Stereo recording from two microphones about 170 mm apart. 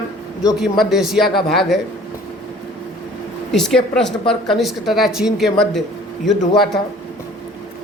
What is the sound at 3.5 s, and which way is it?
A woman's voice, 5° left (ahead or behind).